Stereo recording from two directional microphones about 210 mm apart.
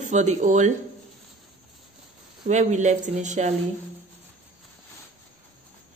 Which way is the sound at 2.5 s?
35° right (ahead or behind).